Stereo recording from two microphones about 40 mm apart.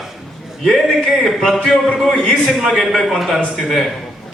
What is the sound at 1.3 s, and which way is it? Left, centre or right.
Speech, centre.